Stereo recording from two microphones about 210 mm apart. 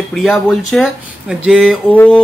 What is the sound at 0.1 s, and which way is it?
Speech, centre (ahead or behind).